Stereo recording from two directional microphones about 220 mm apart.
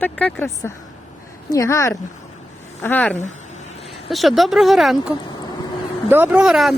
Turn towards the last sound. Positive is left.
turn(degrees=0)  # may be behind; listen again after turning